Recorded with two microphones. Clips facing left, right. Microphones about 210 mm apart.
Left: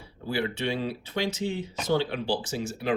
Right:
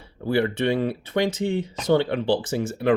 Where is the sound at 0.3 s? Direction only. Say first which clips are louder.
Right 7 dB; 60° right (ahead or behind).